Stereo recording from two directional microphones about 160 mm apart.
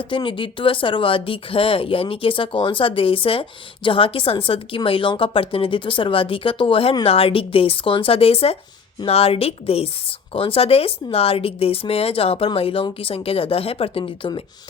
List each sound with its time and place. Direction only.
0.0 s a woman's voice: 30° left (ahead or behind)